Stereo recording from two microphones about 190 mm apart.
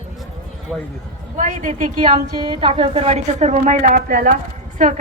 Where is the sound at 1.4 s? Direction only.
45° right (ahead or behind).